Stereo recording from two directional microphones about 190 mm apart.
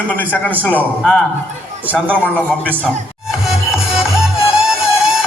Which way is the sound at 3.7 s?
Centre (ahead or behind).